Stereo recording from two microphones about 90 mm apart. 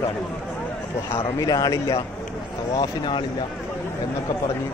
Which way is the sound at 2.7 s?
55° left (ahead or behind).